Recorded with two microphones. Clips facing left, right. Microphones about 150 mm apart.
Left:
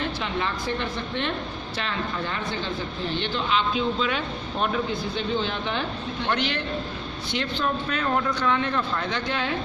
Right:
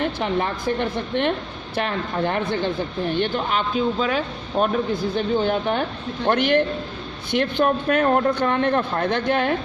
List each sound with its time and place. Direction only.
0.2 s speech: 55° right (ahead or behind)